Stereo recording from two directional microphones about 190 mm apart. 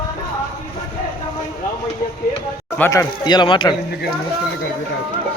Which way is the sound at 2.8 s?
15° left (ahead or behind).